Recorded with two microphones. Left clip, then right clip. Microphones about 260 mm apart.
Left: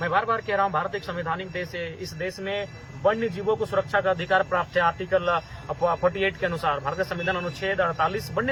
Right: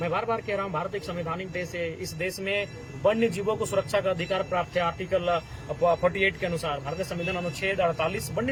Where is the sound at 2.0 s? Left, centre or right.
Left.